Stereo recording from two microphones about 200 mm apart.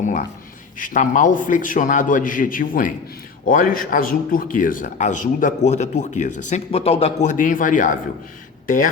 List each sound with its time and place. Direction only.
0.0 s speech: 40° left (ahead or behind)